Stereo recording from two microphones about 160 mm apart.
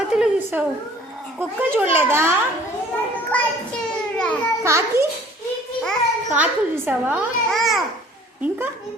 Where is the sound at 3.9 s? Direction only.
5° left (ahead or behind).